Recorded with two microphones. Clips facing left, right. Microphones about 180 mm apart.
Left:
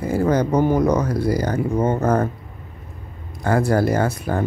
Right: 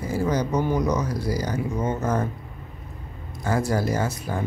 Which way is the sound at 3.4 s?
60° left (ahead or behind).